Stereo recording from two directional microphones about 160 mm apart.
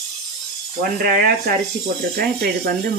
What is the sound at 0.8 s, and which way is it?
Speech, 65° right (ahead or behind).